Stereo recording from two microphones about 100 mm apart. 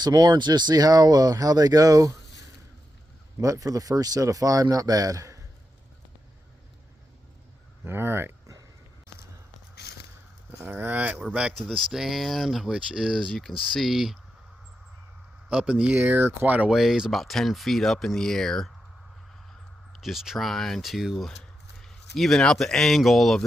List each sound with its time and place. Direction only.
0.0 s speech: 40° right (ahead or behind)
3.4 s speech: 35° right (ahead or behind)
7.9 s speech: 25° right (ahead or behind)
10.6 s speech: 20° right (ahead or behind); by 14.2 s centre (ahead or behind)
15.4 s speech: 10° right (ahead or behind)
16.7 s speech: 5° right (ahead or behind)
19.9 s speech: centre (ahead or behind)